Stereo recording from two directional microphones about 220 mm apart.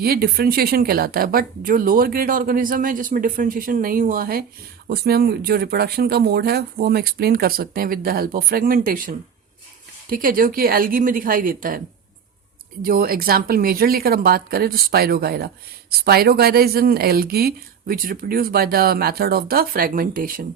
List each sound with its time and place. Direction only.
0.0 s speech: 45° right (ahead or behind)
12.8 s speech: 40° right (ahead or behind)